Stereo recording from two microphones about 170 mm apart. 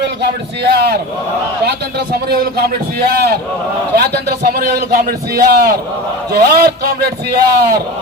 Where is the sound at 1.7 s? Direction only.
70° right (ahead or behind).